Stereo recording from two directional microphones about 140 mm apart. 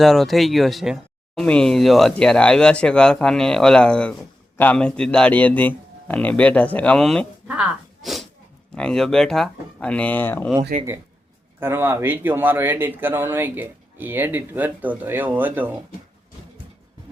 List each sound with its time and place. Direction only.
0.0 s a man's voice: centre (ahead or behind)
7.4 s a sound: 10° right (ahead or behind)
8.7 s a man's voice: 5° left (ahead or behind)
10.6 s speech: 45° right (ahead or behind)
11.6 s speech: 15° right (ahead or behind)